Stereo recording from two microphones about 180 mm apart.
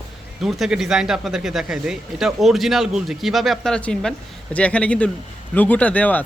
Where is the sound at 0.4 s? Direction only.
Centre (ahead or behind).